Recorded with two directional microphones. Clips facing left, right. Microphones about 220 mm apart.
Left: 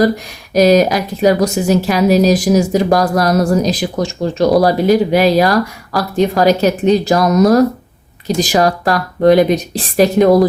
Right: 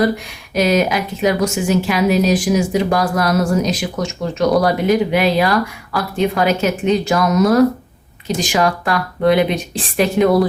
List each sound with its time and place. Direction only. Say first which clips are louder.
0.5 s a woman's voice: left 6 dB; 40° left (ahead or behind)